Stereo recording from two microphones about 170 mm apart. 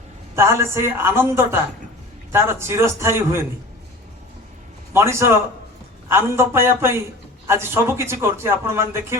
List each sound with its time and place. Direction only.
0.3 s speech: 15° right (ahead or behind)
4.9 s speech: 15° right (ahead or behind)